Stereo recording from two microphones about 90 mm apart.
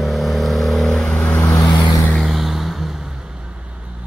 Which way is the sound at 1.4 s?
35° left (ahead or behind).